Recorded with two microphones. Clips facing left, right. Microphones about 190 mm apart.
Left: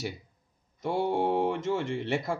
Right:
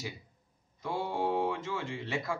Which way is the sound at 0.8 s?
65° left (ahead or behind).